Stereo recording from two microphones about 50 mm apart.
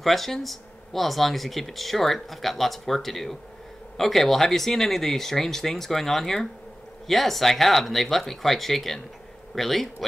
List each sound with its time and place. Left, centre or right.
0.0 s speech: centre